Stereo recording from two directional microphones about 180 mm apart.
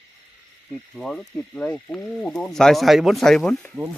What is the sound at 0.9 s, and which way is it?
Speech, centre (ahead or behind).